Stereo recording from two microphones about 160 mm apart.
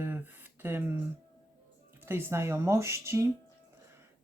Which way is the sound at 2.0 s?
15° right (ahead or behind).